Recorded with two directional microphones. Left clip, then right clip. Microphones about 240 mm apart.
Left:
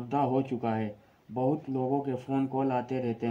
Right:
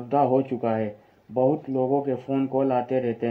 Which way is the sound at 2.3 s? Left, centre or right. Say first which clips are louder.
Right 6 dB; left.